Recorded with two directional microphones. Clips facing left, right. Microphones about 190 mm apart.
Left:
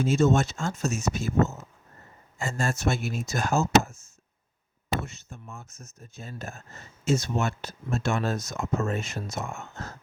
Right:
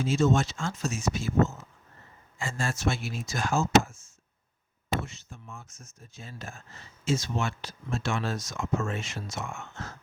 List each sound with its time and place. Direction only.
0.0 s speech: 45° left (ahead or behind)
5.3 s speech: 40° left (ahead or behind)